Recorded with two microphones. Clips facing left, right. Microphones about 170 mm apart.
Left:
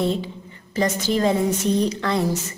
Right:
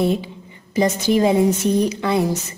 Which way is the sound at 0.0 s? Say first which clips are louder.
Right 3 dB; 15° right (ahead or behind).